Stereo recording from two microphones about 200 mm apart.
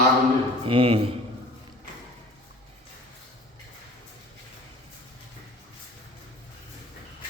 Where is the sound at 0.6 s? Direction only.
30° right (ahead or behind).